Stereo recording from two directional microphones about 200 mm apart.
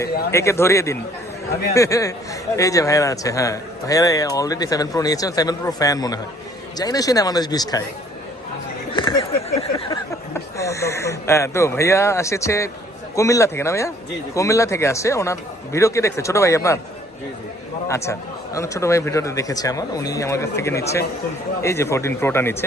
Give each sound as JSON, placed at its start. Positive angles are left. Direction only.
{"t": 0.3, "sound": "a man's voice", "side_deg": 15}
{"t": 8.9, "sound": "a sound", "side_deg": 25}
{"t": 9.9, "sound": "a man's voice", "side_deg": 15}
{"t": 17.8, "sound": "a man's voice", "side_deg": 15}